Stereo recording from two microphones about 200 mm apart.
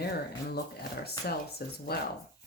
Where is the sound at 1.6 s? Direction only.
50° left (ahead or behind).